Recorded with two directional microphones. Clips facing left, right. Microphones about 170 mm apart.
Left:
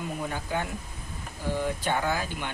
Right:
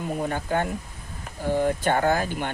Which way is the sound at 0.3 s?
50° right (ahead or behind).